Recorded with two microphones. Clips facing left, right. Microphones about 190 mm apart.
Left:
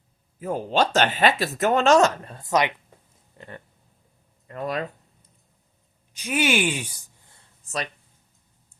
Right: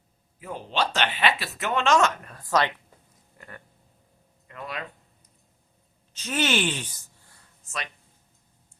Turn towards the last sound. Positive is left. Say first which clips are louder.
# left 6 dB
turn(degrees=35)  # may be behind; listen again after turning